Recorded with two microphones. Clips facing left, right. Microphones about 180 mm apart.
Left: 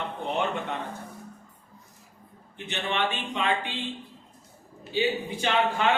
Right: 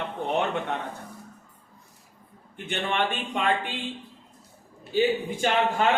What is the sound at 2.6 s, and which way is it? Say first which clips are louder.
A man's voice: right 2 dB; 50° right (ahead or behind).